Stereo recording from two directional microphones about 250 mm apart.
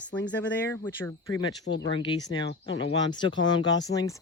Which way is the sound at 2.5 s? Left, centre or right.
Left.